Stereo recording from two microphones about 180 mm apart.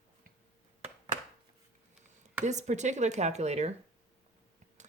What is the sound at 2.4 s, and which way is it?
Speech, 40° right (ahead or behind).